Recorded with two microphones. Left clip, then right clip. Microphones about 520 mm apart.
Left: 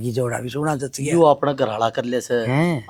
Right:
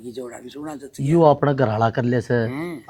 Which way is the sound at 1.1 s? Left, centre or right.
Centre.